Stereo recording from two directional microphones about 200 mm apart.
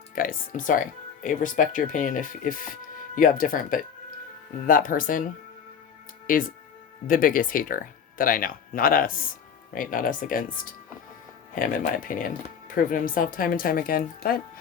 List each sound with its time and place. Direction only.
0.2 s speech: 45° left (ahead or behind)